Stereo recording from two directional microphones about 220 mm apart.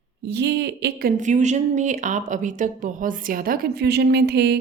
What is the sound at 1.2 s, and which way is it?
Speech, 35° right (ahead or behind).